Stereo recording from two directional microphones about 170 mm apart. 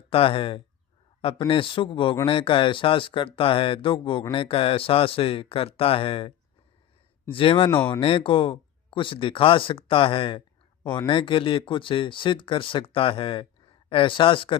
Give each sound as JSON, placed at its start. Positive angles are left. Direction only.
{"t": 0.1, "sound": "speech", "side_deg": 30}